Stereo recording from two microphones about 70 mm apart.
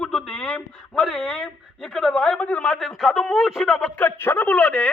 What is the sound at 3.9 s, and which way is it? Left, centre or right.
Speech, left.